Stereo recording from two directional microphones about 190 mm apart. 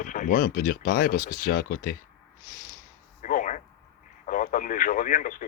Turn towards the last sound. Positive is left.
turn(degrees=45)  # may be behind; listen again after turning